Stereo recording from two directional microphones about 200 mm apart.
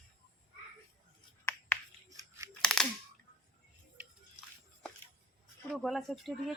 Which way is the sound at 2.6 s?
Centre (ahead or behind).